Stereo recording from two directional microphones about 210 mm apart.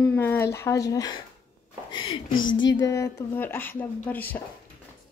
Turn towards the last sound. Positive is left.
turn(degrees=10)  # may be behind; listen again after turning